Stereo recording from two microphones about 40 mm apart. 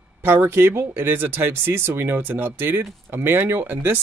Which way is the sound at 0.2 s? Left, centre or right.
Right.